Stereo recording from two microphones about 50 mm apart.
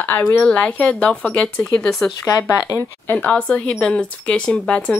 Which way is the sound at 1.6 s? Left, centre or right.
Centre.